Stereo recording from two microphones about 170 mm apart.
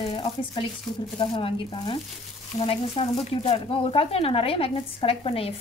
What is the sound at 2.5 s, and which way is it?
Speech, 35° left (ahead or behind).